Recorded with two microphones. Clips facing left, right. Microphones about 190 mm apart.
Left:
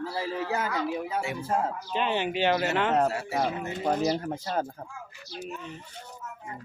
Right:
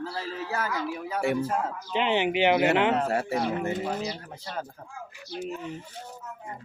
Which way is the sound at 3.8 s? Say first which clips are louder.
Left 6 dB; 45° left (ahead or behind).